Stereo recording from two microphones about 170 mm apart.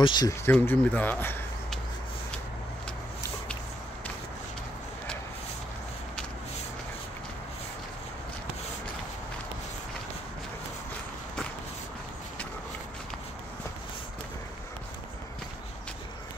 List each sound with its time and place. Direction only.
0.0 s speech: 25° left (ahead or behind)
0.5 s speech: 10° left (ahead or behind)